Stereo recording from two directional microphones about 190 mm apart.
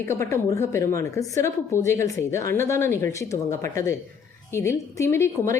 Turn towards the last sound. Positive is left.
turn(degrees=15)  # may be behind; listen again after turning